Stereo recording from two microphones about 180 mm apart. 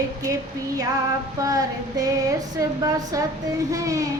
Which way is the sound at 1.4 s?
20° right (ahead or behind).